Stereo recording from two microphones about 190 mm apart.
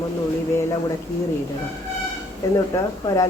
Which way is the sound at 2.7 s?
15° left (ahead or behind).